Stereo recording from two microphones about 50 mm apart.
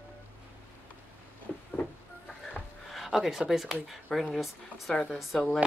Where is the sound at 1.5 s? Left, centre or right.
Centre.